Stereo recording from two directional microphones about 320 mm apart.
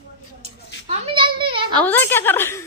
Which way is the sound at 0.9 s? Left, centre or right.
Centre.